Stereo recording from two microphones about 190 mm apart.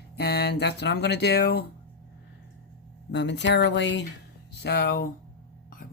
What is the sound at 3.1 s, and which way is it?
Speech, 70° left (ahead or behind).